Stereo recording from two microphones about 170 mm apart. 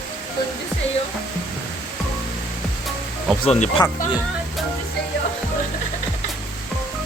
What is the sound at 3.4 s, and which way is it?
Speech, 40° left (ahead or behind).